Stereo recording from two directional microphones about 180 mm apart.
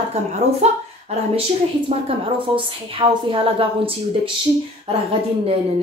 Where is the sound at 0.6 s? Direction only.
35° right (ahead or behind).